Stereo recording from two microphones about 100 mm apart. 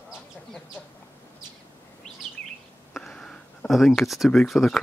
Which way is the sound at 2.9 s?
5° left (ahead or behind).